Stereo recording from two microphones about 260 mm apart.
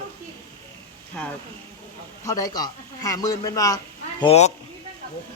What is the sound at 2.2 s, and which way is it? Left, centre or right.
A man's voice, centre.